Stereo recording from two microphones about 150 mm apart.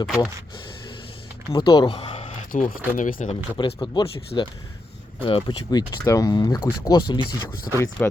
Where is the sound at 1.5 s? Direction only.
30° left (ahead or behind).